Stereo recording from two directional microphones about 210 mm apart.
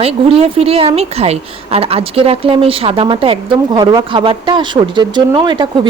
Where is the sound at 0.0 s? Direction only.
30° right (ahead or behind).